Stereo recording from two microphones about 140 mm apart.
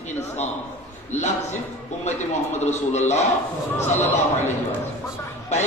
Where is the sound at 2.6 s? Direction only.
55° left (ahead or behind).